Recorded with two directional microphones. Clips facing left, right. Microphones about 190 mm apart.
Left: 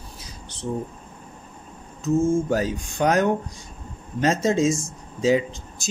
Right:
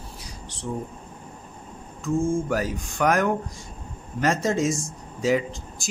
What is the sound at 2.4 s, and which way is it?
Speech, 25° left (ahead or behind).